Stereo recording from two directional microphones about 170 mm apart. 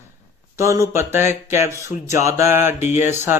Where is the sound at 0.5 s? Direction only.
15° right (ahead or behind).